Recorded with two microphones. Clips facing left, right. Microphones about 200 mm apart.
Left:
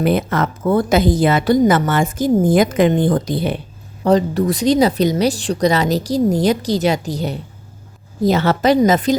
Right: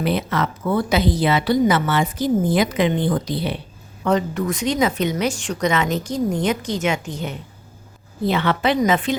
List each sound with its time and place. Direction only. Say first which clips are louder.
0.0 s a woman's voice: left 4 dB; 50° left (ahead or behind)
4.0 s speech: left 5 dB; 35° left (ahead or behind)